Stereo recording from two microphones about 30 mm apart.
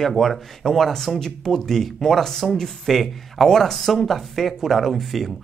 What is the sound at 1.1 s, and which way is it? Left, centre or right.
Speech, centre.